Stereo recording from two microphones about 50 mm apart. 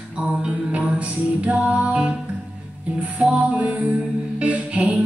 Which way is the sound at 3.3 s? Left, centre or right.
Right.